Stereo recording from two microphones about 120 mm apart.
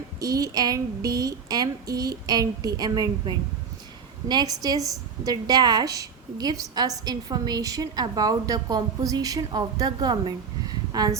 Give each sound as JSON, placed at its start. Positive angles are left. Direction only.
{"t": 0.2, "sound": "a woman's voice", "side_deg": -30}